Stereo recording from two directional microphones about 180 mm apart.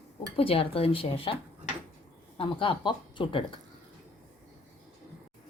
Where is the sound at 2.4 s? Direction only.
30° left (ahead or behind).